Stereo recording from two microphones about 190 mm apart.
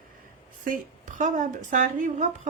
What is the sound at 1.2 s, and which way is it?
A woman's voice, 40° right (ahead or behind).